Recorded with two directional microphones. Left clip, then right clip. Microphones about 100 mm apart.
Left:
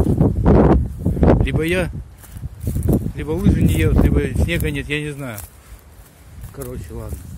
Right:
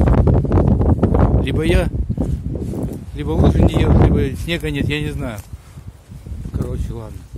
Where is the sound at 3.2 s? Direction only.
80° right.